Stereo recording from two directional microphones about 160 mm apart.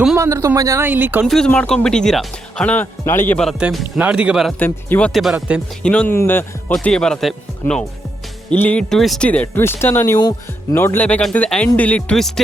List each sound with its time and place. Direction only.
0.2 s speech: 20° right (ahead or behind)
1.3 s speech: 5° left (ahead or behind)
3.3 s speech: centre (ahead or behind)
4.6 s speech: 10° left (ahead or behind)
5.9 s speech: 10° left (ahead or behind)
10.2 s speech: 25° left (ahead or behind)
10.8 s speech: 10° left (ahead or behind)